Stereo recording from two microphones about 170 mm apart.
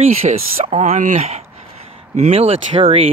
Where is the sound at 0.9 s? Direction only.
50° right (ahead or behind).